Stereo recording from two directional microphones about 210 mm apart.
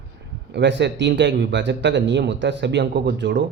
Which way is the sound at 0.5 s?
55° right (ahead or behind).